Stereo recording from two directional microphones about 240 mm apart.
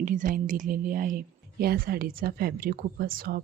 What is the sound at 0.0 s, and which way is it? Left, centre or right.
Speech, right.